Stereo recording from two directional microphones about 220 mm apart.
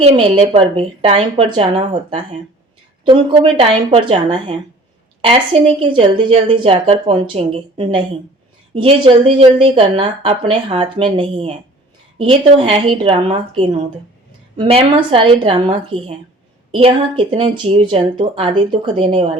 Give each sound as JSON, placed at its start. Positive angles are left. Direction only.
{"t": 0.0, "sound": "a woman's voice", "side_deg": -25}
{"t": 14.6, "sound": "a woman's voice", "side_deg": -25}